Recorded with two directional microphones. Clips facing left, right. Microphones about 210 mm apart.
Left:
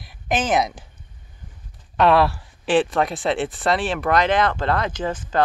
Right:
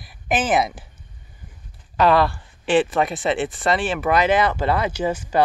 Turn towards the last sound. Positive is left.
turn(degrees=-10)  # may be behind; listen again after turning